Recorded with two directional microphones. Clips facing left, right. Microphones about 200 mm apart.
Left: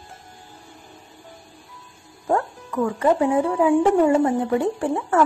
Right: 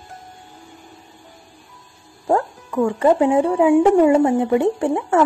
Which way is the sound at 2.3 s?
25° right (ahead or behind).